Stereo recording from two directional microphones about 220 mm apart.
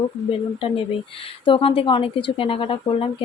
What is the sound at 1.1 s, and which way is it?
Speech, 25° left (ahead or behind).